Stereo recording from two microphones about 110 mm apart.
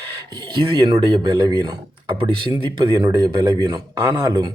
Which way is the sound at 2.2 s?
50° right (ahead or behind).